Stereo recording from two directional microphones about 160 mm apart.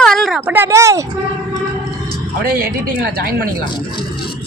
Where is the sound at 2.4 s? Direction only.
70° right (ahead or behind).